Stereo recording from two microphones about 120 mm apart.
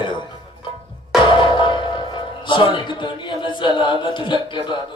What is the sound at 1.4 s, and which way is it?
Music, 40° left (ahead or behind).